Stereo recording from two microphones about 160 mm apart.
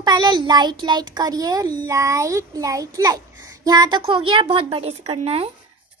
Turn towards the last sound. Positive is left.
turn(degrees=-40)  # may be behind; listen again after turning